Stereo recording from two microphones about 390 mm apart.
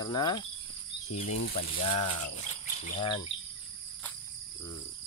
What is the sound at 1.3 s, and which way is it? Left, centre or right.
Speech, left.